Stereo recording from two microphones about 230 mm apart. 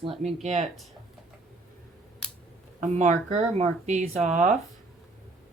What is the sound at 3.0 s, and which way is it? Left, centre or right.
Speech, right.